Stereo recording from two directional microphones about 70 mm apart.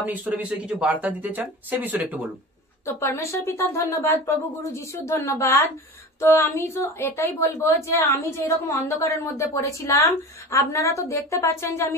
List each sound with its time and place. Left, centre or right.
0.0 s speech: right
1.2 s speech: right
2.8 s a woman's voice: left